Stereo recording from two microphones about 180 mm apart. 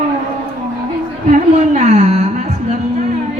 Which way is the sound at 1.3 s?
40° right (ahead or behind).